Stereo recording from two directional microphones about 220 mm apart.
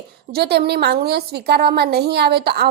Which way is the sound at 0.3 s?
45° right (ahead or behind).